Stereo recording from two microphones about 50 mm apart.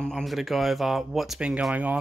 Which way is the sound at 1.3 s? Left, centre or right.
Right.